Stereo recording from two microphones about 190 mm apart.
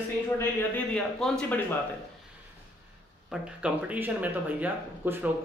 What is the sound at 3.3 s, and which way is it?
Speech, 5° right (ahead or behind).